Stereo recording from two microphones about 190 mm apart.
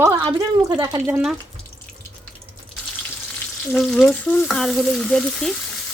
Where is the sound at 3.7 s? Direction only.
Centre (ahead or behind).